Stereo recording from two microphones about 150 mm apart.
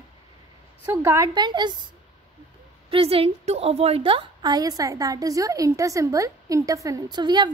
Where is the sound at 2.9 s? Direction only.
40° right (ahead or behind).